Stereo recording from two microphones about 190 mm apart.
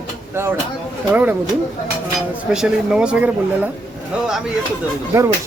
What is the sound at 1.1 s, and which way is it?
Speech, 10° right (ahead or behind).